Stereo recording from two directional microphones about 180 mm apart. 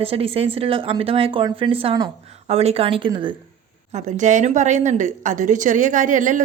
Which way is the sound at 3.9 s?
45° right (ahead or behind).